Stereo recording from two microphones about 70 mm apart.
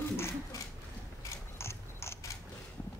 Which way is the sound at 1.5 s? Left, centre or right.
Left.